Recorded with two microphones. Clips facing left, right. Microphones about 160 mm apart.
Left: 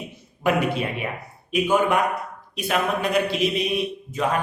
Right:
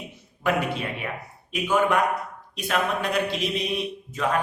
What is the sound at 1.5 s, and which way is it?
Speech, 15° left (ahead or behind).